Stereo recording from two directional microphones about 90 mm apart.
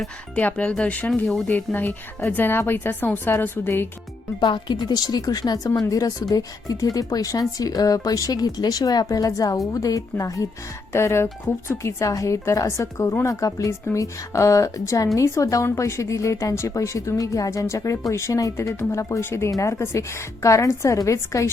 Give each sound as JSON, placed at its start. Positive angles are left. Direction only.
{"t": 0.3, "sound": "speech", "side_deg": 15}
{"t": 1.5, "sound": "speech", "side_deg": 20}
{"t": 4.4, "sound": "a woman's voice", "side_deg": 60}